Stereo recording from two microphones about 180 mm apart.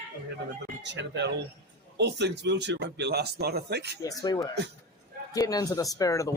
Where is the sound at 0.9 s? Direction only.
75° right (ahead or behind).